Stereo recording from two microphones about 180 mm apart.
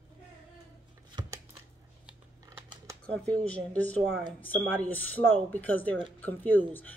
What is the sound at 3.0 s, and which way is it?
Speech, 5° left (ahead or behind).